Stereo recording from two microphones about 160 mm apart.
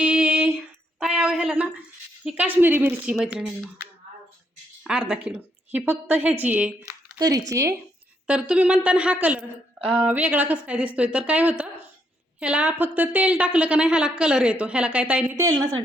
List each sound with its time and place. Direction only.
0.0 s a sound: 5° right (ahead or behind)
2.2 s a woman's voice: 10° right (ahead or behind)
6.8 s speech: 20° right (ahead or behind)
8.3 s a woman's voice: 5° right (ahead or behind)
15.4 s speech: 20° right (ahead or behind)